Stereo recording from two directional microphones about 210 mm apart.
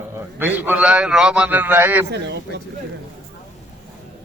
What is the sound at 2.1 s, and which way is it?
Speech, 55° right (ahead or behind).